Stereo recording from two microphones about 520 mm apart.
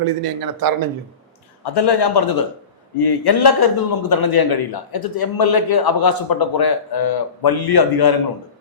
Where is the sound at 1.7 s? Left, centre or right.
Left.